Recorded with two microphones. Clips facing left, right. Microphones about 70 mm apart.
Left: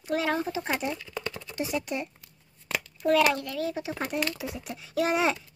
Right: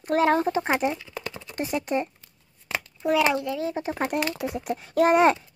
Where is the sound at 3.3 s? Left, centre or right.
Centre.